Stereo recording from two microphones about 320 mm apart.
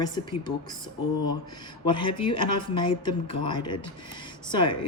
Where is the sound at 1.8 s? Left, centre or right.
Centre.